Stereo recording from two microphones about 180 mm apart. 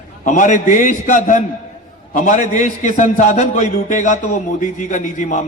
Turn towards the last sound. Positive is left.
turn(degrees=40)  # may be behind; listen again after turning